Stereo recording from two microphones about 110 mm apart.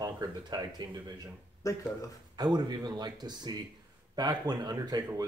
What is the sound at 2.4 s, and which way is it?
Speech, 40° right (ahead or behind).